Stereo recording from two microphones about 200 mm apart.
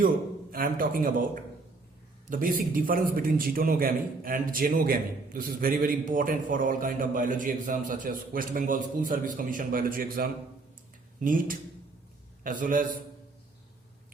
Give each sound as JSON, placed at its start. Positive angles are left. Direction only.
{"t": 0.5, "sound": "a man's voice", "side_deg": -45}
{"t": 2.3, "sound": "a man's voice", "side_deg": -45}